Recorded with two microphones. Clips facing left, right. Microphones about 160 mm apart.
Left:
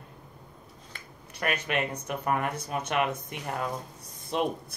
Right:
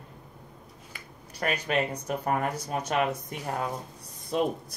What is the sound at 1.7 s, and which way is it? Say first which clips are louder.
Speech: right 2 dB; 35° right (ahead or behind).